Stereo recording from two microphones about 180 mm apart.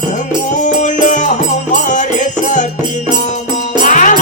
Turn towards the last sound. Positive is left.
turn(degrees=45)  # may be behind; listen again after turning